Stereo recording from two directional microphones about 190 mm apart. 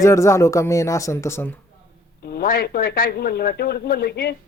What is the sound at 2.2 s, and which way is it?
Speech, 55° left (ahead or behind).